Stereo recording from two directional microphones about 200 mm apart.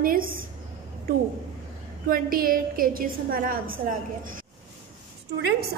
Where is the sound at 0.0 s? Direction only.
45° right (ahead or behind).